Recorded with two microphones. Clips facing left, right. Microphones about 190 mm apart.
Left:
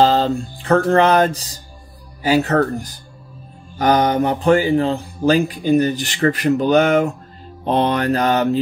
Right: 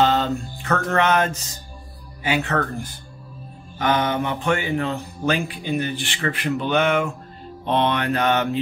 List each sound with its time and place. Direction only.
0.0 s mantra: 35° left (ahead or behind)